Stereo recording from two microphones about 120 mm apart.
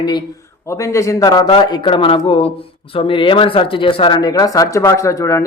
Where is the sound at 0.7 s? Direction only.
25° left (ahead or behind); by 4.2 s 45° left (ahead or behind).